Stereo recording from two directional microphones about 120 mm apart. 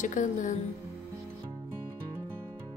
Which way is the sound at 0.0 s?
90° left.